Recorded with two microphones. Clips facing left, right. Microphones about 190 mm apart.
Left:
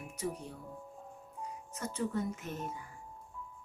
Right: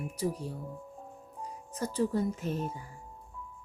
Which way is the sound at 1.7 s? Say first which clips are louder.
Right 6 dB; 35° right (ahead or behind).